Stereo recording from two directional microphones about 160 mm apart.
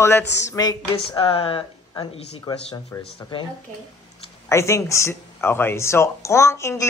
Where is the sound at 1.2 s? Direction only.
35° left (ahead or behind).